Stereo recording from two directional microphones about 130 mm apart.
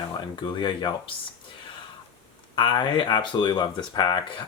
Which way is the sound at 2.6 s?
40° left (ahead or behind).